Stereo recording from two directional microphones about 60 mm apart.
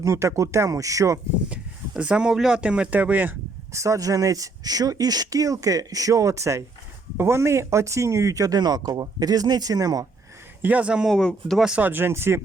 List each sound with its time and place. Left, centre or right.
0.0 s speech: right
2.0 s speech: centre
3.7 s speech: right
10.6 s speech: right
11.1 s speech: centre
11.8 s speech: right